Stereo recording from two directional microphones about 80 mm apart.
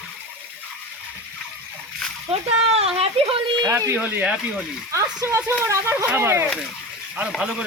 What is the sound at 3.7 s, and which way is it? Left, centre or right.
Speech, right.